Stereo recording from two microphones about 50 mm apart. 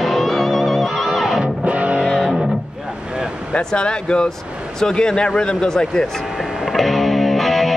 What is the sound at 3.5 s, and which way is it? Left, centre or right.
Speech, centre.